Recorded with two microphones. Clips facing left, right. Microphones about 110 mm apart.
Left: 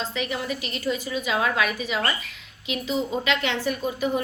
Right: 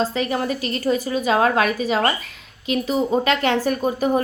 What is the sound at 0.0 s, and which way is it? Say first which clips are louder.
A woman's voice: right 7 dB; 40° right (ahead or behind).